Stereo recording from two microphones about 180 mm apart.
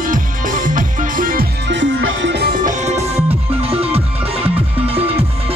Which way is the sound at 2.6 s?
40° right (ahead or behind).